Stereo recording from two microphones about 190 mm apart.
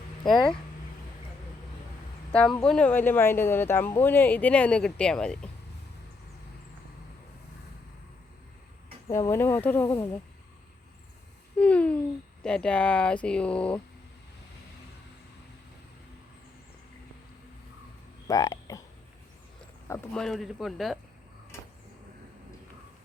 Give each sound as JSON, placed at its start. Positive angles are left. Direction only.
{"t": 2.6, "sound": "speech", "side_deg": 5}
{"t": 9.1, "sound": "speech", "side_deg": 15}
{"t": 11.5, "sound": "speech", "side_deg": 5}
{"t": 18.3, "sound": "speech", "side_deg": 20}
{"t": 20.1, "sound": "speech", "side_deg": 0}